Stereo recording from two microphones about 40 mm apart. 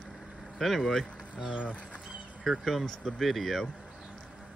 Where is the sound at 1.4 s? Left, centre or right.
Right.